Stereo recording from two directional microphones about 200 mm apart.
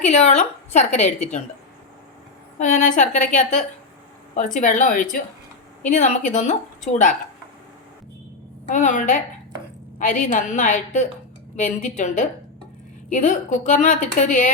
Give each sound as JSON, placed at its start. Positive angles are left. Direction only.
{"t": 0.0, "sound": "a woman's voice", "side_deg": 35}
{"t": 2.6, "sound": "a woman's voice", "side_deg": 40}
{"t": 8.6, "sound": "a woman's voice", "side_deg": 35}